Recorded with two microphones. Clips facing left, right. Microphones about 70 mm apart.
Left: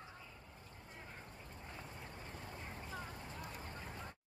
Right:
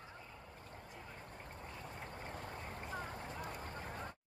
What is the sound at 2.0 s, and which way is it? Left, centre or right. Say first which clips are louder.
Vehicle: right 4 dB; right.